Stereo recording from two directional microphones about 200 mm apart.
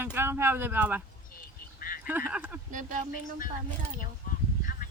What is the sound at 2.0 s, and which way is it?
Speech, 10° right (ahead or behind).